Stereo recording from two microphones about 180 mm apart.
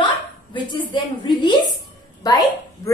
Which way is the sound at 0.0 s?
25° left (ahead or behind).